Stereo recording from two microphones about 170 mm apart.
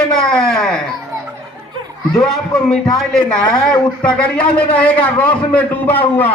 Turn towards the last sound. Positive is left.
turn(degrees=10)  # may be behind; listen again after turning